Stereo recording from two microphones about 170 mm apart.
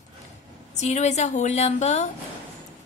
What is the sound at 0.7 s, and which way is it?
A woman's voice, 45° left (ahead or behind).